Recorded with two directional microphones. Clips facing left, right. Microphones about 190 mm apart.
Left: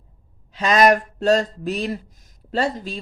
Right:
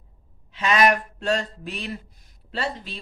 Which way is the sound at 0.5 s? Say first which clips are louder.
Left 4 dB; 40° left (ahead or behind).